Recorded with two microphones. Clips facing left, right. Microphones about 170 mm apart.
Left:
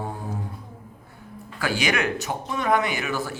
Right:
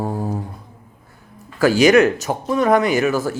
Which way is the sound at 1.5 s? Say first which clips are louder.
Right 13 dB; 40° right (ahead or behind).